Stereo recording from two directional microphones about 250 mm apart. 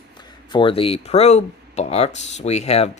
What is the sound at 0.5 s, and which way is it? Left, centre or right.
Speech, left.